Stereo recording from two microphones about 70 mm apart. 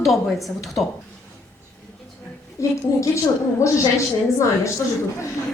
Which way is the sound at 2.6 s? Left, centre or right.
Left.